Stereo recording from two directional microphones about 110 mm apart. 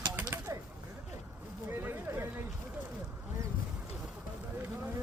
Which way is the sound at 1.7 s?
20° right (ahead or behind).